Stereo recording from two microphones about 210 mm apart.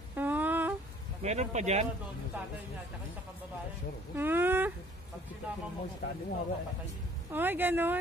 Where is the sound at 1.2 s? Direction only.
35° right (ahead or behind).